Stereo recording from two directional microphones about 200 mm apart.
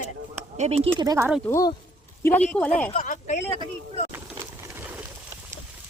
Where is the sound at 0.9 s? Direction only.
15° right (ahead or behind).